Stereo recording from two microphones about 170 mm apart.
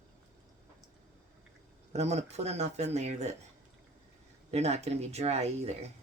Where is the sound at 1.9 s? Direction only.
40° right (ahead or behind).